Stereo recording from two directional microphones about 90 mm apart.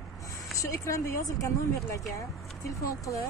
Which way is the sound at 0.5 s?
35° left (ahead or behind).